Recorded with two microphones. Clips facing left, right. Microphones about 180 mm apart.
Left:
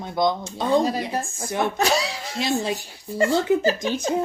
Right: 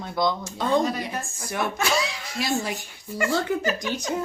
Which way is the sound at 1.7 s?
35° left (ahead or behind).